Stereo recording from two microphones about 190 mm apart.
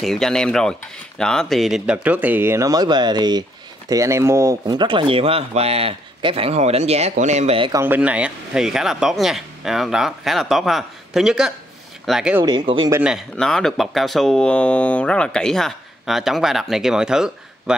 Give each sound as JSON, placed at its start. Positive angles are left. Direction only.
{"t": 0.0, "sound": "speech", "side_deg": 0}
{"t": 7.7, "sound": "speech", "side_deg": -10}
{"t": 12.4, "sound": "speech", "side_deg": -25}
{"t": 13.0, "sound": "speech", "side_deg": 0}